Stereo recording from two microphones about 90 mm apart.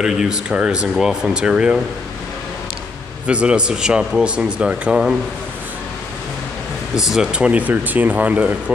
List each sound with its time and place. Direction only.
0.0 s speech: 5° right (ahead or behind)
3.3 s speech: 10° right (ahead or behind)
7.0 s speech: 5° right (ahead or behind)